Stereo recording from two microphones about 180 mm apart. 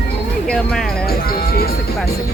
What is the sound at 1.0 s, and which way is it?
Music, 55° left (ahead or behind).